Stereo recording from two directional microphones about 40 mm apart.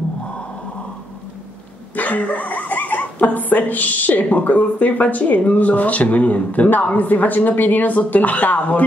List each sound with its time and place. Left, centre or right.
2.0 s speech: left